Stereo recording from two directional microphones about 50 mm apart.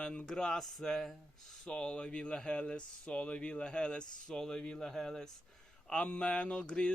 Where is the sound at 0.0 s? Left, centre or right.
Centre.